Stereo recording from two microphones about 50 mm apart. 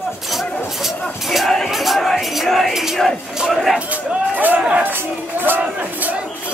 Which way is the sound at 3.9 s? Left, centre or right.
Right.